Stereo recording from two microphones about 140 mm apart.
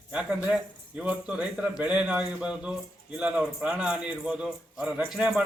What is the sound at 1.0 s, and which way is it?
A man's voice, 10° right (ahead or behind).